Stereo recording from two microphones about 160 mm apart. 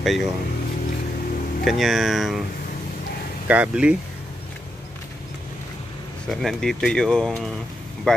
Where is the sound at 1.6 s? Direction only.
Centre (ahead or behind).